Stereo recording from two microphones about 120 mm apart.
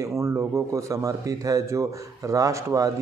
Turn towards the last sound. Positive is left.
turn(degrees=-25)  # may be behind; listen again after turning